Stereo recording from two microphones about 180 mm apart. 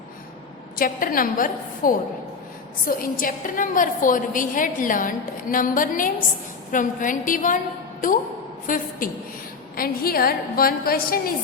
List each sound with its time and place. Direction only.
0.8 s a woman's voice: 50° left (ahead or behind)
8.6 s a woman's voice: 50° left (ahead or behind)